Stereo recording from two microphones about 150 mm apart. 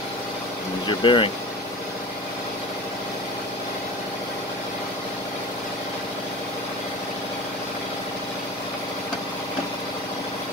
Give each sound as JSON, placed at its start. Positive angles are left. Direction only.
{"t": 0.8, "sound": "speech", "side_deg": 35}